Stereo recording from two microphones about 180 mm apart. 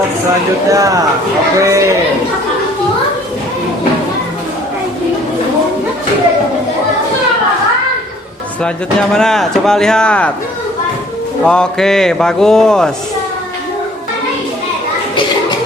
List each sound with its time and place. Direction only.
0.7 s speech: 20° right (ahead or behind)
8.6 s speech: 5° left (ahead or behind)
11.4 s speech: 5° left (ahead or behind)